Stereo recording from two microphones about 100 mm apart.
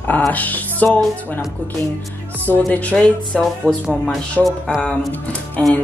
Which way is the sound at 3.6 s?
10° right (ahead or behind).